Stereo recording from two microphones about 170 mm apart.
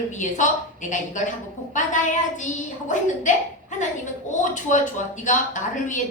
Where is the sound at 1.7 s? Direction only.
45° left (ahead or behind).